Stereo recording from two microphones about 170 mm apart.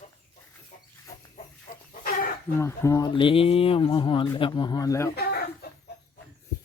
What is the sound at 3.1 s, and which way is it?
Speech, 30° left (ahead or behind).